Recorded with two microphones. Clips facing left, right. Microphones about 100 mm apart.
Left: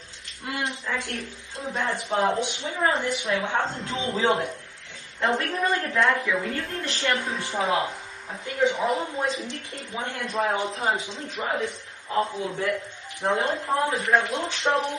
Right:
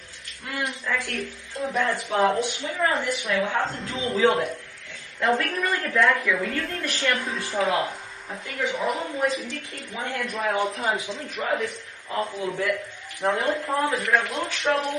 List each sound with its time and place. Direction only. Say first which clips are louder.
0.4 s a sound: even; 20° left (ahead or behind)
1.7 s speech: right 1 dB; 20° left (ahead or behind)
13.2 s speech: right 1 dB; 25° left (ahead or behind)